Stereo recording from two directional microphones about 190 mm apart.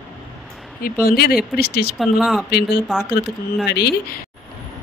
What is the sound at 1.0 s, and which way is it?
Speech, 55° left (ahead or behind).